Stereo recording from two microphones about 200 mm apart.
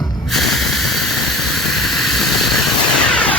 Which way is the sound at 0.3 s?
Centre (ahead or behind).